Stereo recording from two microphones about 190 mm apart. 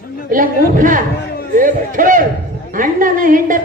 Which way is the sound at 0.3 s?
45° right (ahead or behind).